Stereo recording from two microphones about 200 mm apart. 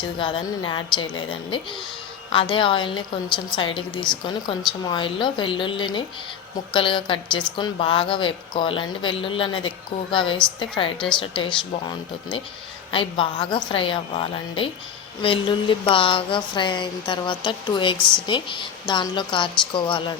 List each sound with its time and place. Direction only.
0.0 s speech: 25° left (ahead or behind)